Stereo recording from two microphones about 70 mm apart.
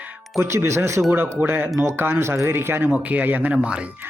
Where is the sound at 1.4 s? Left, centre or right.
Right.